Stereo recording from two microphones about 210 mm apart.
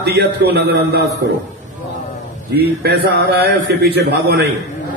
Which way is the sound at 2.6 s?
50° right (ahead or behind).